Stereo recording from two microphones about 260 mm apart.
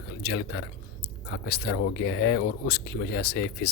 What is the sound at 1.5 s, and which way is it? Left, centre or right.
Speech, left.